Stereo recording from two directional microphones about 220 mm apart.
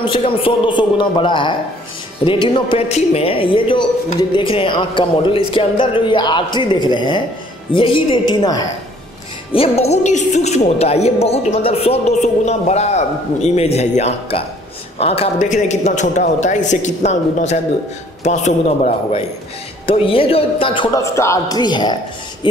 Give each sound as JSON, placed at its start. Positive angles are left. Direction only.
{"t": 0.0, "sound": "a man's voice", "side_deg": 25}